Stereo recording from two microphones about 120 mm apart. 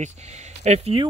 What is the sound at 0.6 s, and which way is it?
Speech, 65° right (ahead or behind).